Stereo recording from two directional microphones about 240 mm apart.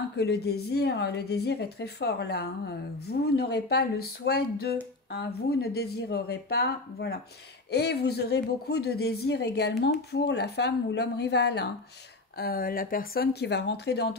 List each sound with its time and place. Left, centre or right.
0.2 s speech: left